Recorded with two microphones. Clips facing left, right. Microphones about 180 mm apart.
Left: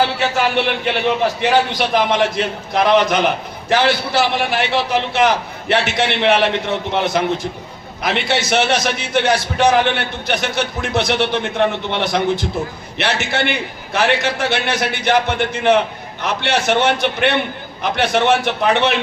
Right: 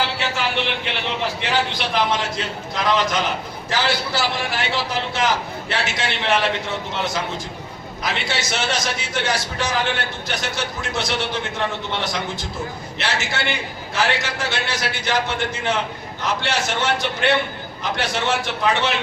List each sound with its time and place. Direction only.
0.9 s a man's voice: 50° left (ahead or behind)